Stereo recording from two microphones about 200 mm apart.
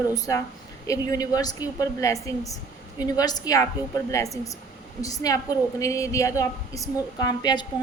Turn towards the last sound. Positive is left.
turn(degrees=20)  # may be behind; listen again after turning